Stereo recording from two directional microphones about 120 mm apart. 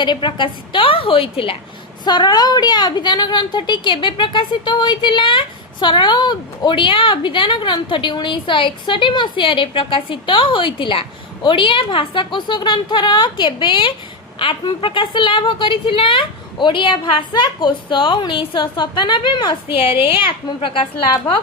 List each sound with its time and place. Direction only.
0.0 s a woman's voice: 40° left (ahead or behind)
2.0 s a woman's voice: 35° left (ahead or behind)